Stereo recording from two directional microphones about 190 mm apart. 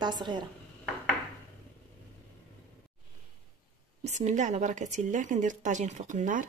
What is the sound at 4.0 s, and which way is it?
A woman's voice, 35° right (ahead or behind).